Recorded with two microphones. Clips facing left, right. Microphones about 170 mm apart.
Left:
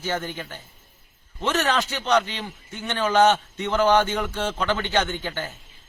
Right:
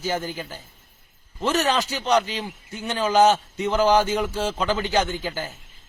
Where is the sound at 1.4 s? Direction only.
10° right (ahead or behind).